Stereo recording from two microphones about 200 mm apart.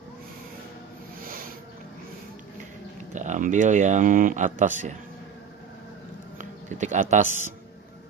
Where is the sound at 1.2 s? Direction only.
45° right (ahead or behind).